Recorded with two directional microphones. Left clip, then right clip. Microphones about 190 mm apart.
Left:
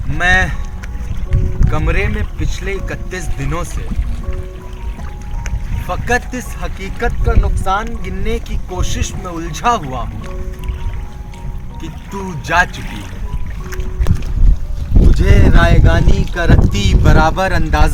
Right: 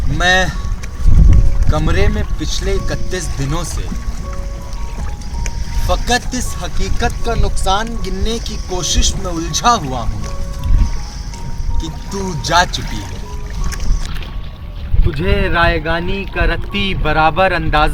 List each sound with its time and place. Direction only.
0.2 s speech: 25° left (ahead or behind)
1.7 s speech: 30° left (ahead or behind)
5.9 s speech: 25° left (ahead or behind)
12.1 s speech: 10° left (ahead or behind)
12.4 s speech: 25° left (ahead or behind)
15.2 s speech: 10° left (ahead or behind)
17.7 s speech: 10° right (ahead or behind)